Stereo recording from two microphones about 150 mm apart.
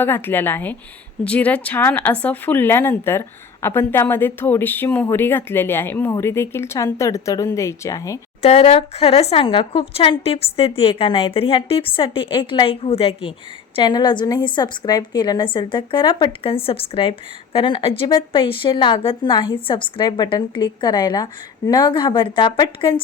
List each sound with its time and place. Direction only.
0.0 s speech: 15° left (ahead or behind)
8.4 s a woman's voice: 40° left (ahead or behind)
13.7 s a woman's voice: 30° left (ahead or behind)